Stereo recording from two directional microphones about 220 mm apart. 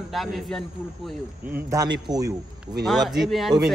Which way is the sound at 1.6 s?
15° right (ahead or behind).